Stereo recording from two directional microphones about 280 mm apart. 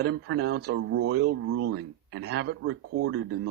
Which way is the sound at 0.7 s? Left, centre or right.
Right.